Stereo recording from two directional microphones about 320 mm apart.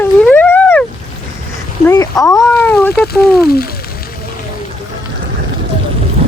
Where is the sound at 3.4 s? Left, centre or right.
Left.